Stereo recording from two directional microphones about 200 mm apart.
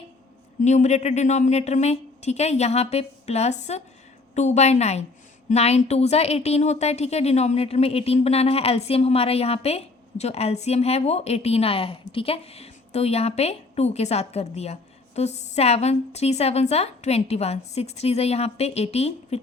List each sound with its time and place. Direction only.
0.6 s a woman's voice: 35° left (ahead or behind)